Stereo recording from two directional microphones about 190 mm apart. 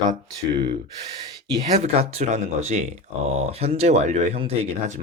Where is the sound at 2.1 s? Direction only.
35° right (ahead or behind).